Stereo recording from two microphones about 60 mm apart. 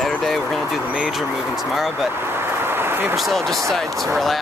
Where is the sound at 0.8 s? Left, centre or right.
Centre.